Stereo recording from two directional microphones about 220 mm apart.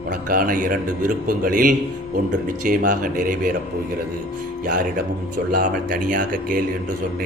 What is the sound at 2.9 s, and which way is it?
Speech, 35° right (ahead or behind).